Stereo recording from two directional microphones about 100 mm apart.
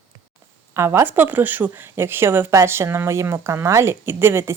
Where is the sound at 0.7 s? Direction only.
25° right (ahead or behind).